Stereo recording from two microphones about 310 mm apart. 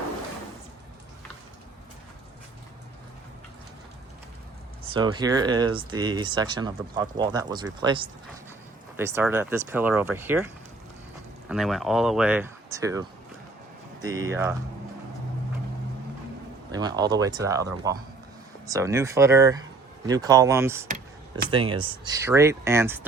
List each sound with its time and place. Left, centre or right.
5.1 s speech: centre
16.7 s speech: centre
20.8 s a sound: right
21.5 s speech: centre